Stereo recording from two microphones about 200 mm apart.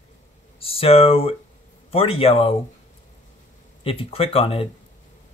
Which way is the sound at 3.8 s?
30° left (ahead or behind).